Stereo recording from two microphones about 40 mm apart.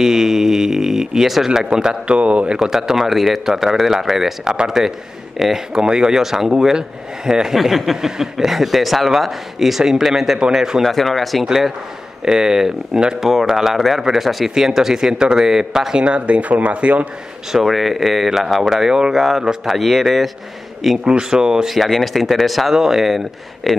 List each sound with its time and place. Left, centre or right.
0.0 s a sound: centre
2.1 s speech: right
2.6 s speech: centre
3.0 s speech: centre
7.5 s speech: centre
10.8 s speech: centre
11.4 s speech: centre
16.1 s speech: right
17.6 s speech: centre
19.1 s speech: centre
21.0 s speech: right
21.6 s speech: centre